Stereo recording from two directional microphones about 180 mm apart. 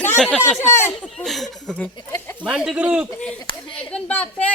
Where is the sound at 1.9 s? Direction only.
25° left (ahead or behind).